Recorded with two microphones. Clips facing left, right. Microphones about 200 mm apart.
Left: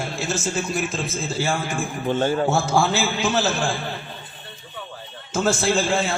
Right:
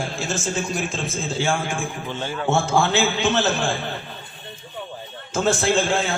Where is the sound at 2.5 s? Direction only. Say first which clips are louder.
Even; centre (ahead or behind).